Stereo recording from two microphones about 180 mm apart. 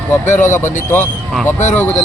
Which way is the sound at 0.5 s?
15° left (ahead or behind).